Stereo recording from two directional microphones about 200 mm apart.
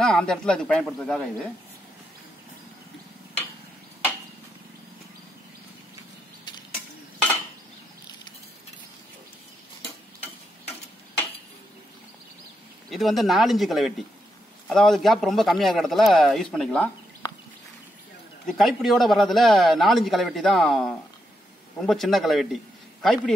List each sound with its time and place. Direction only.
0.0 s a man's voice: 5° left (ahead or behind)
12.9 s a man's voice: centre (ahead or behind)
17.2 s a sound: 20° left (ahead or behind)
18.5 s a man's voice: centre (ahead or behind)